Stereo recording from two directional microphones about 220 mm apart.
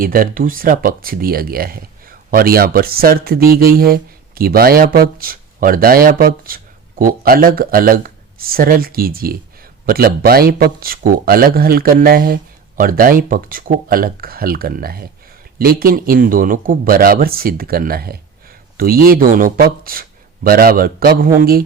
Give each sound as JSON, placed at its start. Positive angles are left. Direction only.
{"t": 0.0, "sound": "speech", "side_deg": -40}